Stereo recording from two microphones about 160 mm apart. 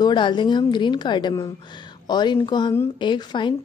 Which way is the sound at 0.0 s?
30° left (ahead or behind).